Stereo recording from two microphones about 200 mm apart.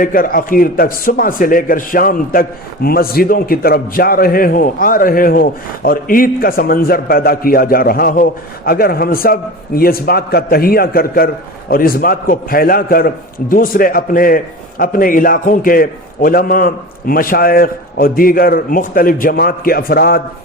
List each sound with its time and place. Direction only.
0.0 s a man's voice: 45° left (ahead or behind)